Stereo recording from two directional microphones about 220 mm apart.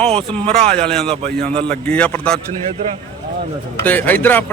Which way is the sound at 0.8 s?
5° left (ahead or behind).